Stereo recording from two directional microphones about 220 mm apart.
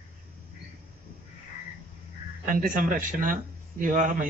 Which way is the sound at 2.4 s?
40° right (ahead or behind).